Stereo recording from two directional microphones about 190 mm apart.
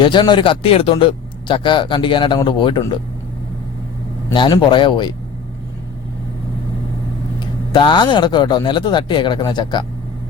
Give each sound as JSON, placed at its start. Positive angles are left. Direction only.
{"t": 0.0, "sound": "a man's voice", "side_deg": 25}
{"t": 4.3, "sound": "a man's voice", "side_deg": 25}
{"t": 7.7, "sound": "a man's voice", "side_deg": 25}